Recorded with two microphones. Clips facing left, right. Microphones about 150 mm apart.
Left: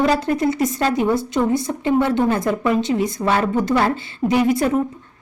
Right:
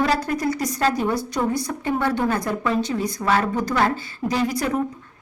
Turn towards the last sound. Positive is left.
turn(degrees=25)  # may be behind; listen again after turning